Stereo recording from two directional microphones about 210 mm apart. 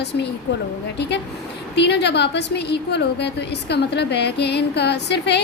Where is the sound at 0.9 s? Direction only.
55° left (ahead or behind).